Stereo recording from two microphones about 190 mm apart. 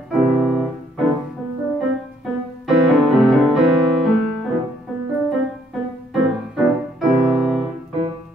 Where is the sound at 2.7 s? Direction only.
Centre (ahead or behind).